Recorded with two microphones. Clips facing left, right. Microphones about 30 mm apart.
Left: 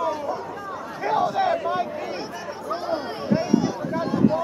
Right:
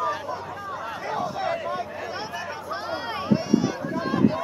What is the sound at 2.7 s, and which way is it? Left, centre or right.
Run, centre.